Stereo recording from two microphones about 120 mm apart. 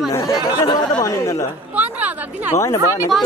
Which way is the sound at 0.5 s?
35° left (ahead or behind).